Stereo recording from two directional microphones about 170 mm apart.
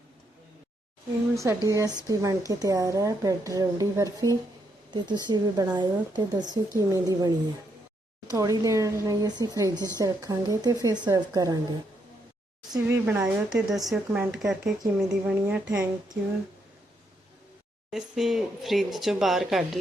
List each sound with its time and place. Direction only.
1.4 s a woman's voice: 20° right (ahead or behind)
8.3 s a woman's voice: 20° right (ahead or behind)
12.7 s a woman's voice: 15° right (ahead or behind)
13.2 s a woman's voice: centre (ahead or behind)
17.9 s speech: centre (ahead or behind)